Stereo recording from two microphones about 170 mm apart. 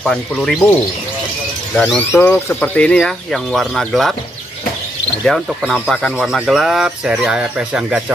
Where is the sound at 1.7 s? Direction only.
5° left (ahead or behind).